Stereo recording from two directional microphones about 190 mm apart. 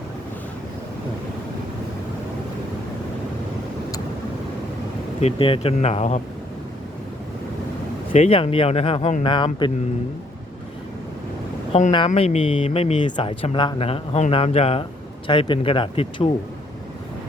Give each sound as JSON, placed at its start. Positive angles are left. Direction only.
{"t": 5.2, "sound": "speech", "side_deg": 30}
{"t": 8.1, "sound": "speech", "side_deg": 35}
{"t": 11.7, "sound": "speech", "side_deg": 30}